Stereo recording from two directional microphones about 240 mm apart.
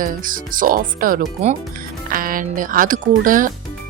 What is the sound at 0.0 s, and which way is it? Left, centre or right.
Speech, right.